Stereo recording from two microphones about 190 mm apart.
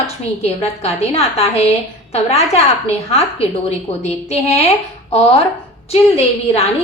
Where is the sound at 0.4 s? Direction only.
35° left (ahead or behind).